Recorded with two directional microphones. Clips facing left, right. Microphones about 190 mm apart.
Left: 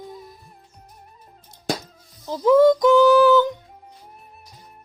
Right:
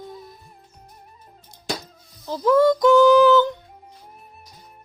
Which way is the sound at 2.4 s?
10° left (ahead or behind).